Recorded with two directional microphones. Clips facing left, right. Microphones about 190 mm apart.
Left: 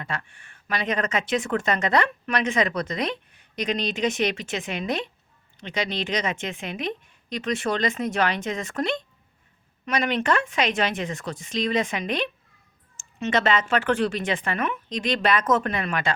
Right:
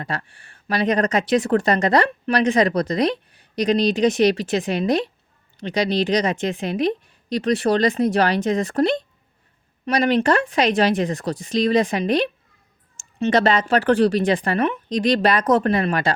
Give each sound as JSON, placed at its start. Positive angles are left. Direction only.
{"t": 0.0, "sound": "speech", "side_deg": -35}